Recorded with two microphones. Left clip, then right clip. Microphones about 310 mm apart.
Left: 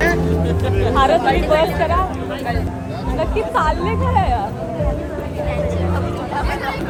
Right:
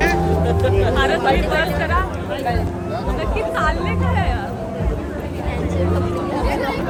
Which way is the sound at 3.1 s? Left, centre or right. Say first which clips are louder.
Left 5 dB; centre.